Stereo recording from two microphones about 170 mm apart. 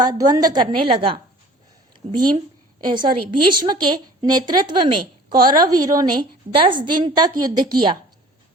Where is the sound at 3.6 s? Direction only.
25° right (ahead or behind).